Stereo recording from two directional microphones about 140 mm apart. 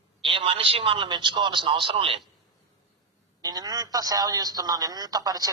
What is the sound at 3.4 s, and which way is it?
A man's voice, 30° right (ahead or behind).